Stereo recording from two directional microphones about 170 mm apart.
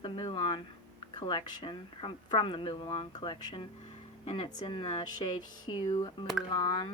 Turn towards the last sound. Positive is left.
turn(degrees=25)  # may be behind; listen again after turning